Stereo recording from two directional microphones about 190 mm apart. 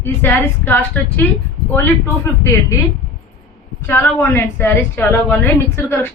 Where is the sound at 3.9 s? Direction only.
10° left (ahead or behind).